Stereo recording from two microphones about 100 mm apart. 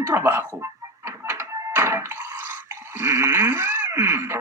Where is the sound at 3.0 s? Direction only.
25° right (ahead or behind).